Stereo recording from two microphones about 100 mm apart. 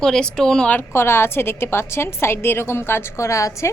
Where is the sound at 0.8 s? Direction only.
25° left (ahead or behind).